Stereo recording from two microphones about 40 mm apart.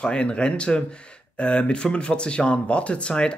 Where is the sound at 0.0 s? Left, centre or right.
Left.